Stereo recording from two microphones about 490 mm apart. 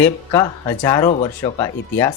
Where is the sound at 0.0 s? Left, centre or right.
Centre.